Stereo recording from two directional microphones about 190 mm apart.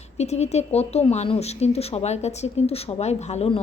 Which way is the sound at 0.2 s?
35° left (ahead or behind).